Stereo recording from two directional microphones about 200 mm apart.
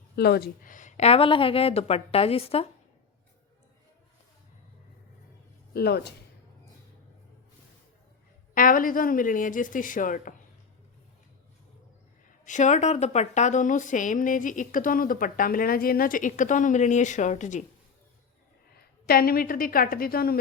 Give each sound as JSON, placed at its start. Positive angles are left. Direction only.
{"t": 0.2, "sound": "a woman's voice", "side_deg": 55}
{"t": 5.7, "sound": "a woman's voice", "side_deg": 55}
{"t": 8.5, "sound": "a woman's voice", "side_deg": 45}
{"t": 12.5, "sound": "a woman's voice", "side_deg": 35}
{"t": 19.0, "sound": "a woman's voice", "side_deg": 50}